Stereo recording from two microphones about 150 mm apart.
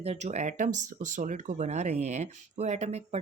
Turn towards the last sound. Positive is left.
turn(degrees=-45)  # may be behind; listen again after turning